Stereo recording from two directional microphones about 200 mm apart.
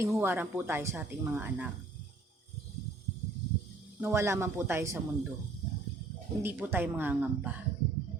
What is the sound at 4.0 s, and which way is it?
Speech, 15° right (ahead or behind).